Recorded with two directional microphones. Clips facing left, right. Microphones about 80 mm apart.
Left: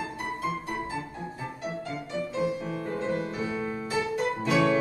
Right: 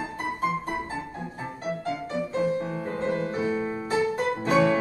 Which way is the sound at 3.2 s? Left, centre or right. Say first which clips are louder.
Right 4 dB; right.